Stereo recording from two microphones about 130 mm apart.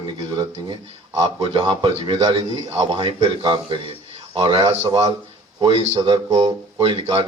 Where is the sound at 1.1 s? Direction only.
50° right (ahead or behind).